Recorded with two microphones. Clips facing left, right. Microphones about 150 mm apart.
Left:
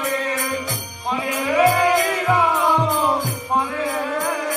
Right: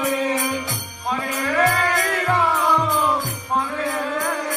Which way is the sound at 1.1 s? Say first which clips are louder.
Left 2 dB; 5° left (ahead or behind).